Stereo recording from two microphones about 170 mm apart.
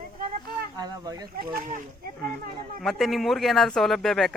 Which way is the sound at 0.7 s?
25° right (ahead or behind).